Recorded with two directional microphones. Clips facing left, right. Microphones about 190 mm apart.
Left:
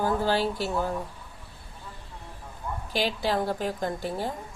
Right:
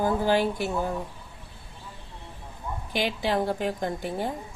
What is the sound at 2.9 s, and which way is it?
A woman's voice, 15° right (ahead or behind).